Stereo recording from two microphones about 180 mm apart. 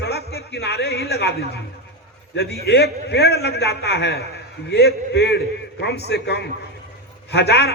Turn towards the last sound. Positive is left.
turn(degrees=65)  # may be behind; listen again after turning